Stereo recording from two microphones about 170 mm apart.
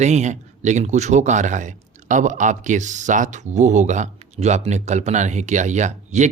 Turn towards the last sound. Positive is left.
turn(degrees=-45)  # may be behind; listen again after turning